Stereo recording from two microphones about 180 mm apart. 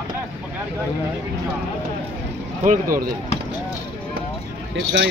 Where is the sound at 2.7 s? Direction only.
50° right (ahead or behind).